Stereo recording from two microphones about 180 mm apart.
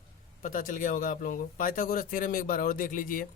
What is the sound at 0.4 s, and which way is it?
A man's voice, 50° left (ahead or behind).